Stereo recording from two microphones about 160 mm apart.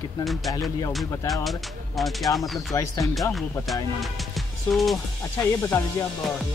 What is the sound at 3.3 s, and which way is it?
Speech, centre (ahead or behind).